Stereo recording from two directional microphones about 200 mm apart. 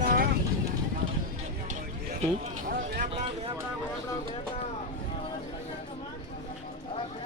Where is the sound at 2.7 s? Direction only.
45° right (ahead or behind).